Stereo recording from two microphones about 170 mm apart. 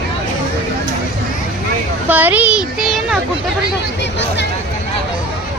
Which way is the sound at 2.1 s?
10° right (ahead or behind).